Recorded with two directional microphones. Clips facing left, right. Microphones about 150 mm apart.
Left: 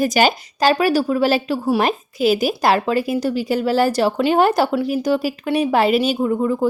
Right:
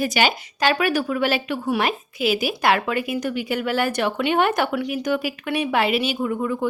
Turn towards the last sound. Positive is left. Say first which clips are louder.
# left 5 dB
turn(degrees=30)  # may be behind; listen again after turning